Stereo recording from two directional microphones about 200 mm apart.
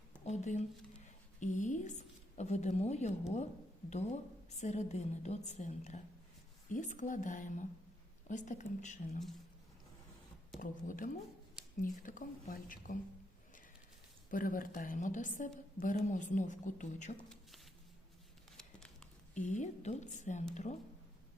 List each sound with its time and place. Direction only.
0.3 s a sound: 35° left (ahead or behind)
1.4 s a woman's voice: 40° left (ahead or behind)
10.6 s speech: 45° left (ahead or behind)
14.3 s a woman's voice: 40° left (ahead or behind)
17.2 s speech: 5° left (ahead or behind)
19.3 s a woman's voice: 35° left (ahead or behind)